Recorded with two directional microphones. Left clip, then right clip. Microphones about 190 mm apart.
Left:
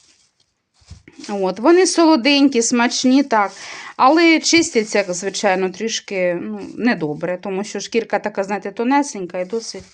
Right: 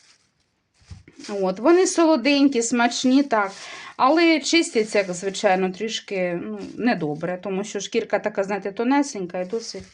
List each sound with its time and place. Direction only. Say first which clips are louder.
1.3 s speech: left 4 dB; 40° left (ahead or behind)